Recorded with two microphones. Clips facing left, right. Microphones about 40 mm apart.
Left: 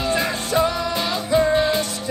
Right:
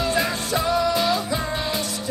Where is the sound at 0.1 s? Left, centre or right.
Left.